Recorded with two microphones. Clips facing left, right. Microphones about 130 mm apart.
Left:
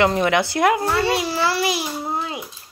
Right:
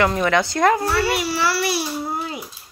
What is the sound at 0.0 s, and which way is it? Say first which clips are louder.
A child's voice: left 1 dB; 20° left (ahead or behind).